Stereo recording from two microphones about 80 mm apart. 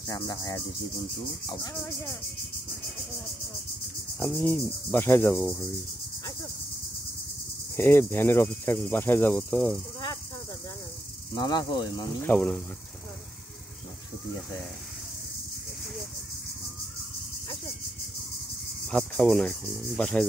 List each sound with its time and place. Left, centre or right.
0.1 s speech: left
4.3 s cricket: centre
5.4 s speech: centre
7.7 s cricket: left
11.3 s speech: left
12.2 s cricket: centre
18.9 s speech: centre